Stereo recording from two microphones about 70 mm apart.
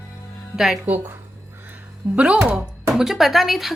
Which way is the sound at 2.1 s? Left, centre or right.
Centre.